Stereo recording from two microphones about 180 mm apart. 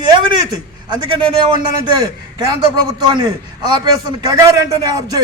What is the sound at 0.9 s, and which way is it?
A man's voice, 25° right (ahead or behind).